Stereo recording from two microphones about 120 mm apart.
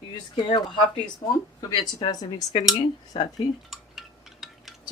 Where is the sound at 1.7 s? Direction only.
35° left (ahead or behind).